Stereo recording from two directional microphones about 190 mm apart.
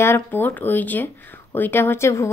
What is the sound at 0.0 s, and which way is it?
A woman's voice, 10° left (ahead or behind).